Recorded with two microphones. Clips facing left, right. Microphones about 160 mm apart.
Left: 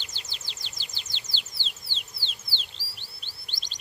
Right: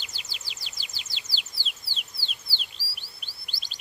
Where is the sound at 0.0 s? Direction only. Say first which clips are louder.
Even; 10° right (ahead or behind).